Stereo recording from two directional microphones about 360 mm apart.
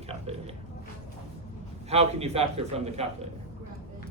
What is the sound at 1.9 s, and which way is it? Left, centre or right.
Speech, centre.